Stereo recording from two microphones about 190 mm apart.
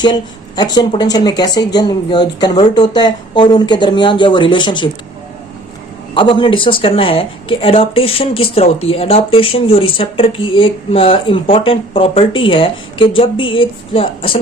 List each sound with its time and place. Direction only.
0.0 s speech: 25° left (ahead or behind)
6.1 s speech: 25° left (ahead or behind)